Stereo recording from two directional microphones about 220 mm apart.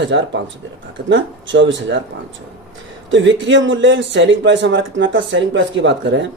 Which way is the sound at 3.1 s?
55° right (ahead or behind).